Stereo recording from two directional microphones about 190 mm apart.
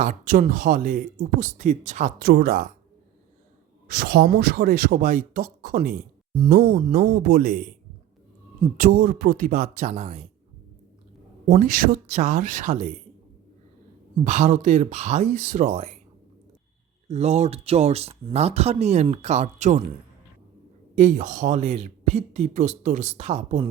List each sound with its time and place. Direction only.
0.0 s speech: 45° right (ahead or behind)
3.8 s speech: 55° right (ahead or behind)
6.6 s speech: 35° right (ahead or behind)
8.8 s speech: 50° right (ahead or behind)
11.4 s speech: 45° right (ahead or behind)
14.3 s speech: 40° right (ahead or behind)
17.1 s speech: 35° right (ahead or behind)
20.9 s speech: 40° right (ahead or behind)